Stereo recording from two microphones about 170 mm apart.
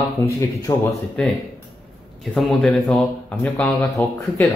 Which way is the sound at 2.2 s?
Centre (ahead or behind).